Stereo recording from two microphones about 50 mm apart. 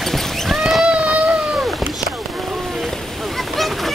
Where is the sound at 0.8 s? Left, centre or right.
Right.